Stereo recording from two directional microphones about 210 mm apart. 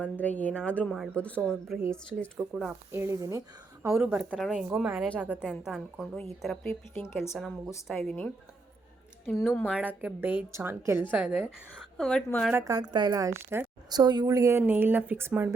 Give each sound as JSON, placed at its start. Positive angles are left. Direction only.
{"t": 0.0, "sound": "a woman's voice", "side_deg": 5}
{"t": 2.4, "sound": "a woman's voice", "side_deg": -15}
{"t": 3.9, "sound": "a woman's voice", "side_deg": -5}
{"t": 9.7, "sound": "a woman's voice", "side_deg": -10}
{"t": 11.9, "sound": "a woman's voice", "side_deg": 5}
{"t": 12.5, "sound": "a woman's voice", "side_deg": -15}